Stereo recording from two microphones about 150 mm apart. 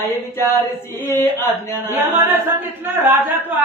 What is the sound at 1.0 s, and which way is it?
Speech, 20° left (ahead or behind).